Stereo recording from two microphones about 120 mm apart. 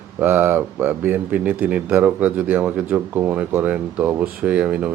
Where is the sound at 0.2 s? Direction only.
15° right (ahead or behind).